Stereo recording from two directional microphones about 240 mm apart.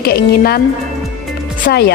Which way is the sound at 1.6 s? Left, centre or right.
Left.